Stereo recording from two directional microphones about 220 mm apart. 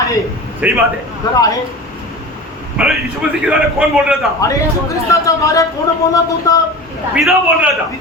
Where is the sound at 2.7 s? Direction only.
Centre (ahead or behind).